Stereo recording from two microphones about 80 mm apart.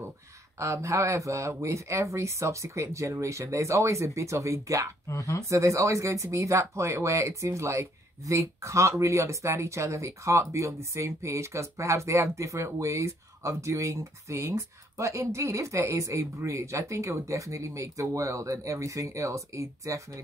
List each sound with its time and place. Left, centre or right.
0.6 s speech: right
5.0 s speech: left
5.5 s speech: right